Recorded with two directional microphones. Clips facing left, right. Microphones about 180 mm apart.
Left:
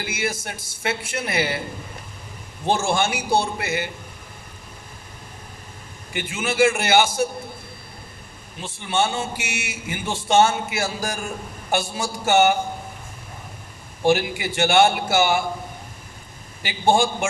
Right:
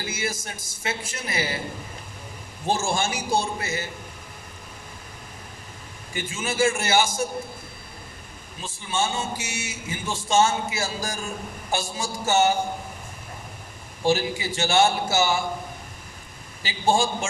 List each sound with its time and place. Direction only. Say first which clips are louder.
0.1 s a man's voice: left 3 dB; 65° left (ahead or behind)
2.6 s a man's voice: left 4 dB; 65° left (ahead or behind)
6.1 s a man's voice: left 4 dB; 65° left (ahead or behind)
8.6 s a man's voice: left 4 dB; 65° left (ahead or behind)
14.0 s a man's voice: left 3 dB; 60° left (ahead or behind)
16.6 s a man's voice: left 3 dB; 60° left (ahead or behind)